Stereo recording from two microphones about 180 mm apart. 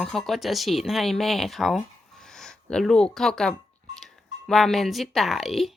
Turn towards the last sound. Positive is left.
turn(degrees=0)  # may be behind; listen again after turning